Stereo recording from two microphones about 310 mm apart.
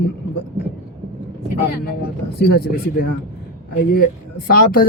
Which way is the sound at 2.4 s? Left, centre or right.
Left.